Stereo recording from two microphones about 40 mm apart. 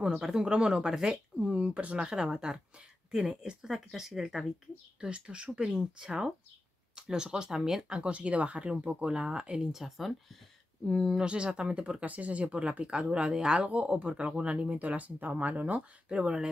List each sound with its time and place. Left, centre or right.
0.0 s speech: centre
5.0 s speech: right; by 7.8 s centre
7.9 s speech: right
9.7 s speech: centre
11.1 s speech: right
12.0 s speech: right
13.7 s speech: right
14.8 s speech: right
16.1 s speech: right